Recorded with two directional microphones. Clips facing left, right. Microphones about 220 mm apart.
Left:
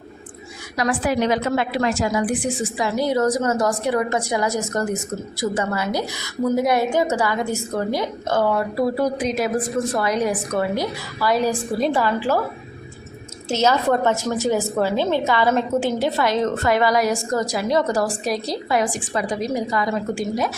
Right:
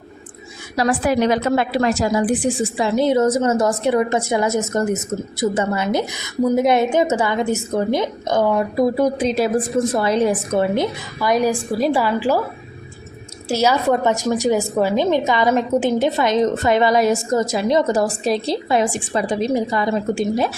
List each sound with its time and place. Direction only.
0.8 s a woman's voice: 40° right (ahead or behind); by 12.4 s 10° right (ahead or behind)
13.5 s a woman's voice: 10° right (ahead or behind); by 20.5 s 25° right (ahead or behind)